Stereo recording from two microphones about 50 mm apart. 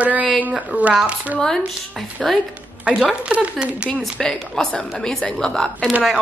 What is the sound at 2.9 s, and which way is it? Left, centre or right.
Speech, right.